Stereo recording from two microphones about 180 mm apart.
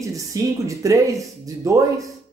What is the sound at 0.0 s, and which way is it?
A woman's voice, 20° right (ahead or behind).